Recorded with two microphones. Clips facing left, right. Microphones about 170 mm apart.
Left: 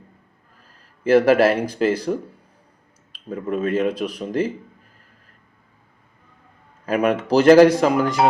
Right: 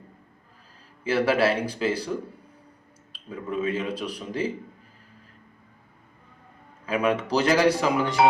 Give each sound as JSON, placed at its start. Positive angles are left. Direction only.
{"t": 1.0, "sound": "speech", "side_deg": 45}
{"t": 3.2, "sound": "speech", "side_deg": 50}
{"t": 6.8, "sound": "speech", "side_deg": 45}